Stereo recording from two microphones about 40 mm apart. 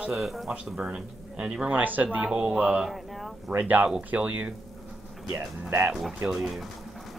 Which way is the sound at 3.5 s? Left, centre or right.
Right.